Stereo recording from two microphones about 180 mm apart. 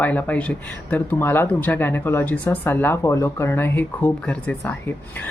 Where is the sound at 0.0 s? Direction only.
10° left (ahead or behind).